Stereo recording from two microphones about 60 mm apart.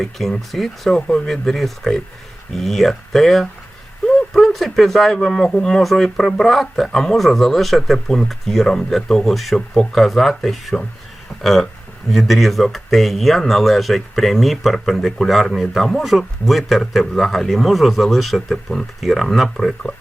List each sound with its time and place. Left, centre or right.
0.0 s speech: centre
12.1 s speech: centre